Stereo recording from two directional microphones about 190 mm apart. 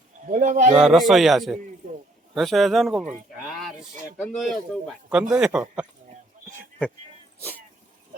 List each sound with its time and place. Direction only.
0.3 s speech: 40° right (ahead or behind)
0.8 s a man's voice: centre (ahead or behind)